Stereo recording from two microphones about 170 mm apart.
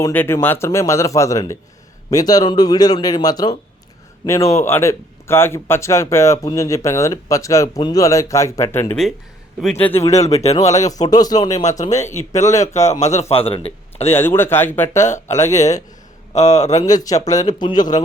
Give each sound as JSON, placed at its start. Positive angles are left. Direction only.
{"t": 0.0, "sound": "speech", "side_deg": 15}
{"t": 10.1, "sound": "speech", "side_deg": 40}
{"t": 11.1, "sound": "speech", "side_deg": 20}
{"t": 11.5, "sound": "a man's voice", "side_deg": 45}
{"t": 11.9, "sound": "speech", "side_deg": 15}
{"t": 12.6, "sound": "speech", "side_deg": 40}
{"t": 14.1, "sound": "speech", "side_deg": 15}
{"t": 15.4, "sound": "a man's voice", "side_deg": 40}
{"t": 16.8, "sound": "speech", "side_deg": 20}